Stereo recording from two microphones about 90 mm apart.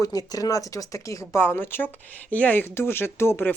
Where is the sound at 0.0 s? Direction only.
45° left (ahead or behind).